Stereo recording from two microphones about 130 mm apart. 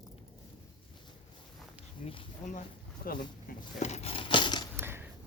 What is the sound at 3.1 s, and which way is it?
Speech, 90° left.